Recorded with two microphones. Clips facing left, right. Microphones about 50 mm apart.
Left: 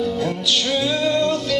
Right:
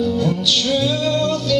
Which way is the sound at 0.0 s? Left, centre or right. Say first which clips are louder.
Right 3 dB; left.